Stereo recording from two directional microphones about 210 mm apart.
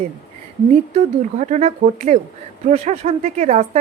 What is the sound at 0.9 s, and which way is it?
A woman's voice, 35° right (ahead or behind).